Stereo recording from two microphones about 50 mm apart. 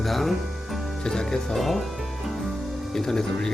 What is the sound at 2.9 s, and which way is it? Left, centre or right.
Speech, centre.